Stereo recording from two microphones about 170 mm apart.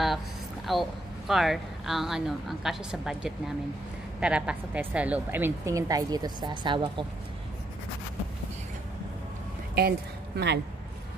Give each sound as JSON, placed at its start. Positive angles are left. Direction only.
{"t": 0.7, "sound": "a woman's voice", "side_deg": 0}
{"t": 9.8, "sound": "speech", "side_deg": -70}